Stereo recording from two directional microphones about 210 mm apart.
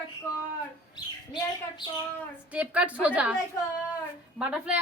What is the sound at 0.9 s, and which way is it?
Speech, 20° left (ahead or behind).